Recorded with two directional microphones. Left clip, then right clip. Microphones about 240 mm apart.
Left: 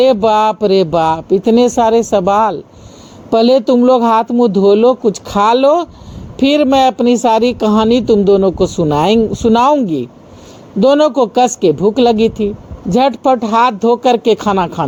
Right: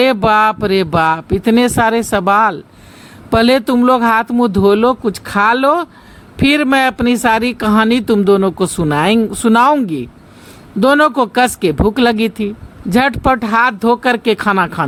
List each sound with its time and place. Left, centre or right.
0.0 s speech: right
6.3 s a man's voice: centre
7.2 s speech: right
9.8 s speech: centre
10.8 s speech: right
11.5 s speech: centre
11.9 s speech: right
12.1 s speech: centre
13.0 s speech: right